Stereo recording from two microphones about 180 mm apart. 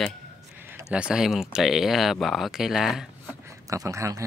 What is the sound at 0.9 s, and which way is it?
Speech, 5° right (ahead or behind).